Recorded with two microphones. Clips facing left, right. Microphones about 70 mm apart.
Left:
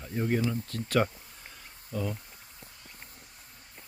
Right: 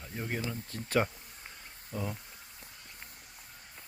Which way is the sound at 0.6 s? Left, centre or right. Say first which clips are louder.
Left 3 dB; centre.